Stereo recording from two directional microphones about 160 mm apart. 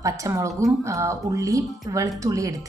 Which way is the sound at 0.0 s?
20° right (ahead or behind).